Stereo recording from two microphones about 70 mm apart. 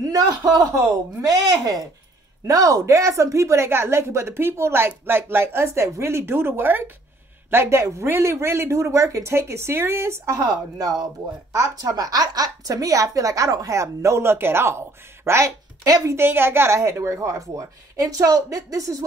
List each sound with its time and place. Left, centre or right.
0.0 s a man's voice: right
7.5 s a woman's voice: right
10.4 s a man's voice: right
15.8 s a man's voice: right
16.2 s a woman's voice: right